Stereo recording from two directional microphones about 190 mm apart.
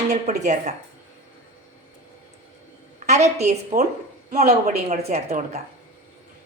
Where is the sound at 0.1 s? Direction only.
40° right (ahead or behind).